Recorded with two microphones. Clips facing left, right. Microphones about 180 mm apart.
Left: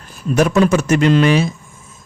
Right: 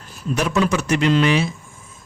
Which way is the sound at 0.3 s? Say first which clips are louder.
Left 6 dB; 50° left (ahead or behind).